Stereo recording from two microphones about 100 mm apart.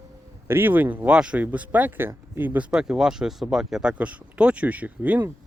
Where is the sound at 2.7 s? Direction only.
5° right (ahead or behind).